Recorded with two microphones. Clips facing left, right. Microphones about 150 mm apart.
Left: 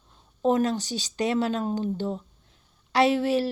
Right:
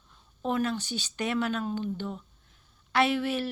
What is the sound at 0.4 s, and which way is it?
Speech, 35° left (ahead or behind).